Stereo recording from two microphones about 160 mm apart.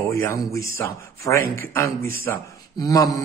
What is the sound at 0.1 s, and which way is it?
A man's voice, 15° left (ahead or behind).